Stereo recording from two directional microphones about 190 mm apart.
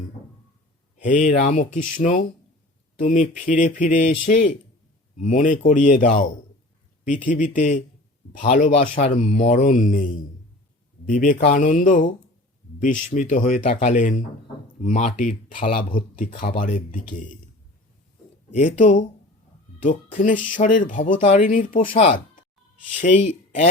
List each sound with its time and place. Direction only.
0.9 s speech: 45° left (ahead or behind)
5.2 s speech: 45° left (ahead or behind)
18.5 s speech: 40° left (ahead or behind)